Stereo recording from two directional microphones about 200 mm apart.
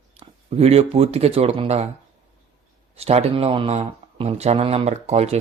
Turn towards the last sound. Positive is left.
turn(degrees=-30)  # may be behind; listen again after turning